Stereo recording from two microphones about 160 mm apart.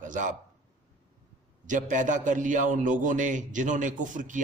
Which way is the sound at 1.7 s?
55° right (ahead or behind).